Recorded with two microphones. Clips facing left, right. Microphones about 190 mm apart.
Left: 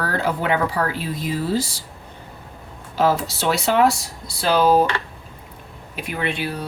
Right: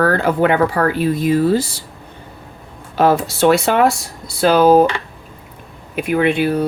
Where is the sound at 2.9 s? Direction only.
55° right (ahead or behind).